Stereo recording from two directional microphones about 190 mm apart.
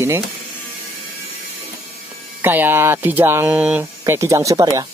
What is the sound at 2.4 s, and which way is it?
Speech, 10° right (ahead or behind).